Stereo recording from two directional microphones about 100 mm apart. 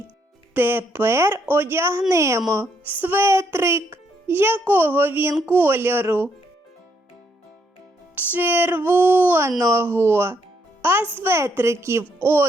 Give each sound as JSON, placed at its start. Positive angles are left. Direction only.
{"t": 0.5, "sound": "a child's voice", "side_deg": -20}
{"t": 2.6, "sound": "a child's voice", "side_deg": -20}
{"t": 8.1, "sound": "a child's voice", "side_deg": -20}